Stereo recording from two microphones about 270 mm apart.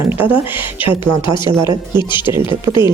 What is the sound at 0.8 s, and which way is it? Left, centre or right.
Speech, centre.